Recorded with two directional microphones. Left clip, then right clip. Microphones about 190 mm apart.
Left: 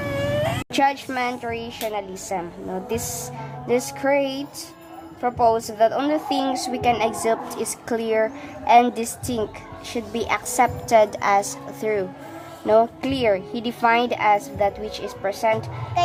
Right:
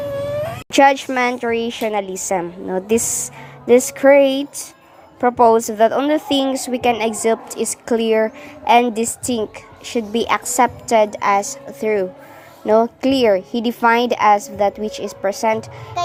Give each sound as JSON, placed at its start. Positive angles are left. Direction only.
{"t": 0.7, "sound": "a woman's voice", "side_deg": -40}